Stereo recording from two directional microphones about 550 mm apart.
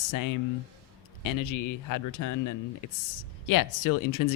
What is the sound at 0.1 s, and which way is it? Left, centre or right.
Speech, left.